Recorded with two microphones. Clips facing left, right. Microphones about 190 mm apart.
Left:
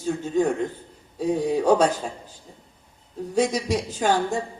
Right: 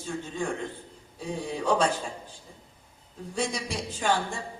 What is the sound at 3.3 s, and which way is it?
A woman's voice, 40° left (ahead or behind).